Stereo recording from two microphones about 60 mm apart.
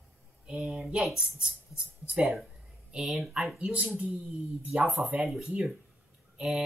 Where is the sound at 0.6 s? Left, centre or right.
Centre.